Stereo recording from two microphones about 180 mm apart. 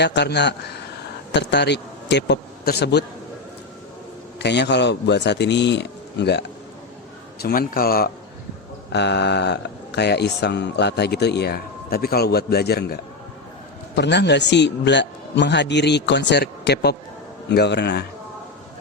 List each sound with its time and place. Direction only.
0.0 s a man's voice: 70° left (ahead or behind)
4.4 s speech: 70° left (ahead or behind)
7.3 s speech: 60° left (ahead or behind)
8.9 s speech: 70° left (ahead or behind)
13.9 s speech: 75° left (ahead or behind)